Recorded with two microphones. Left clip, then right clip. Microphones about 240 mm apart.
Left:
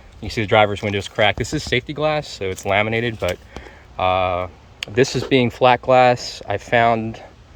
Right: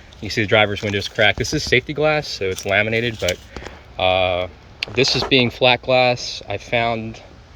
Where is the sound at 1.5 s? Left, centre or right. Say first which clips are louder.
Right 4 dB; left.